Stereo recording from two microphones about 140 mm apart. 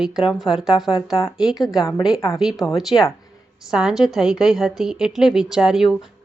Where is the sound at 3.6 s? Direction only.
5° right (ahead or behind).